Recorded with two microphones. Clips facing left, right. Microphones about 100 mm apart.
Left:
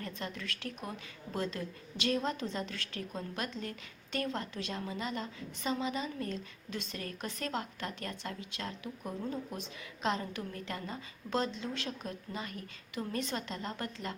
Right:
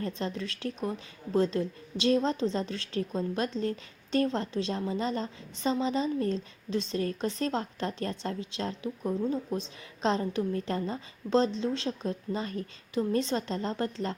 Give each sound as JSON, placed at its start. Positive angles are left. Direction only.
{"t": 0.0, "sound": "a woman's voice", "side_deg": -30}